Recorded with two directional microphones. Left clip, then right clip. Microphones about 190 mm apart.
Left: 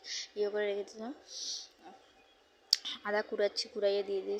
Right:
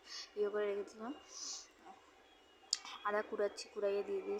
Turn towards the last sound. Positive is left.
turn(degrees=15)  # may be behind; listen again after turning